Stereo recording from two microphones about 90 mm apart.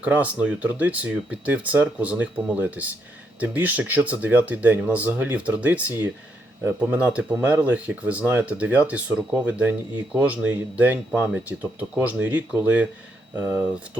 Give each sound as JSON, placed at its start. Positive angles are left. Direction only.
{"t": 0.0, "sound": "speech", "side_deg": -15}